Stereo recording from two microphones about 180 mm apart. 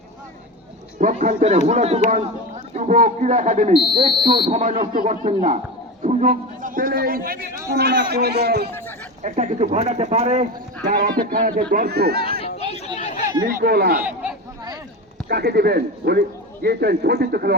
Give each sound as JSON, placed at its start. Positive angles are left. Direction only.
{"t": 0.9, "sound": "speech", "side_deg": -45}
{"t": 3.9, "sound": "speech", "side_deg": -25}
{"t": 6.0, "sound": "a sound", "side_deg": -40}
{"t": 7.8, "sound": "a man's voice", "side_deg": -60}
{"t": 8.7, "sound": "a sound", "side_deg": 10}
{"t": 9.2, "sound": "speech", "side_deg": -40}
{"t": 10.8, "sound": "a man's voice", "side_deg": -50}
{"t": 13.0, "sound": "chatter", "side_deg": 40}
{"t": 13.6, "sound": "a man's voice", "side_deg": -60}
{"t": 14.0, "sound": "a sound", "side_deg": -5}
{"t": 15.3, "sound": "a man's voice", "side_deg": -60}